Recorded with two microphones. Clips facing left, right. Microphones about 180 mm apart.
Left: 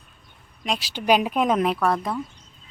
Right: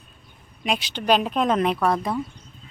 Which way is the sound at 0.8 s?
10° left (ahead or behind).